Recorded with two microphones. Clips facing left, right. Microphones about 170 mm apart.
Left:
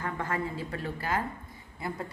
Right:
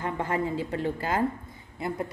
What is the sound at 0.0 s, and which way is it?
A woman's voice, 20° right (ahead or behind).